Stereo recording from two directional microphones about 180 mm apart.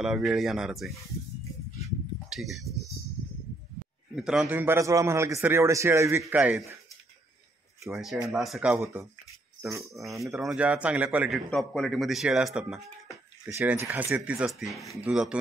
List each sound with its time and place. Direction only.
0.0 s a man's voice: centre (ahead or behind)
2.2 s speech: centre (ahead or behind)
4.1 s a man's voice: 5° right (ahead or behind)
7.9 s a man's voice: centre (ahead or behind)
8.7 s a man's voice: 15° right (ahead or behind)
10.2 s a man's voice: centre (ahead or behind)